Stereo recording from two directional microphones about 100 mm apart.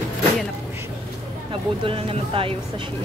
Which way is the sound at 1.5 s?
65° right (ahead or behind).